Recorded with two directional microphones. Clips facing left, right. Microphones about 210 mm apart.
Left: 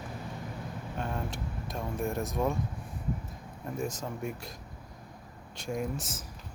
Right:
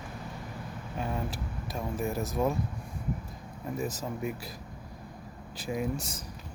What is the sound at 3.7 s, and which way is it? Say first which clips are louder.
Speech: right 1 dB; centre (ahead or behind).